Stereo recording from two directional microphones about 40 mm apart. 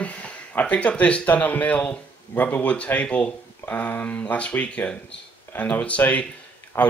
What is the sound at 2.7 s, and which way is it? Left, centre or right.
Speech, left.